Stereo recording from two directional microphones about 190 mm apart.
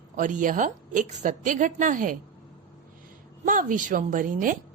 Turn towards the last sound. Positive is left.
turn(degrees=-45)  # may be behind; listen again after turning